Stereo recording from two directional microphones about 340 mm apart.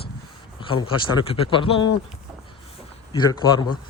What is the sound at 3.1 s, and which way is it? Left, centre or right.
Speech, centre.